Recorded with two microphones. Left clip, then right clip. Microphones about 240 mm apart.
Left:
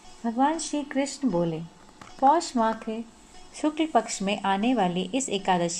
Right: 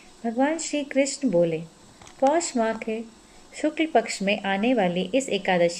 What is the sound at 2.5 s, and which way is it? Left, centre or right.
Speech, left.